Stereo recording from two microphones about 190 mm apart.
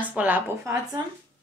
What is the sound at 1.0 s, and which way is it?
Speech, 20° right (ahead or behind).